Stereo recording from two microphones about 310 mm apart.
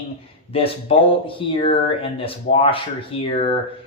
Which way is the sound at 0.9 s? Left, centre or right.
Centre.